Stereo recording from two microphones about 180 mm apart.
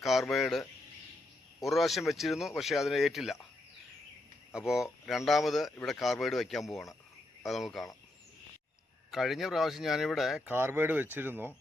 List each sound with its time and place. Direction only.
0.0 s speech: centre (ahead or behind)
1.6 s speech: centre (ahead or behind)
4.5 s speech: 5° right (ahead or behind)
9.1 s speech: centre (ahead or behind)